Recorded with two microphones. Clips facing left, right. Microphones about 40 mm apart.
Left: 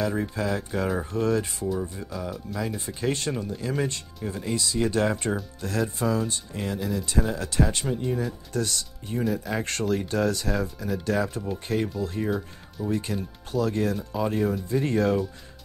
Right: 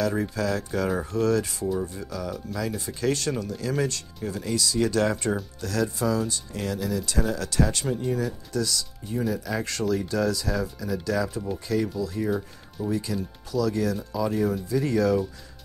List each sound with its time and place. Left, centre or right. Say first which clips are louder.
0.4 s speech: right 1 dB; left
7.8 s speech: right 1 dB; centre
8.5 s speech: right 1 dB; left
12.3 s speech: right 1 dB; centre
12.9 s speech: even; left